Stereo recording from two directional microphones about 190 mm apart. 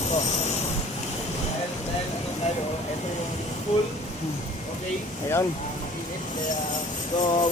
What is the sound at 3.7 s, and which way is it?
Speech, 35° left (ahead or behind).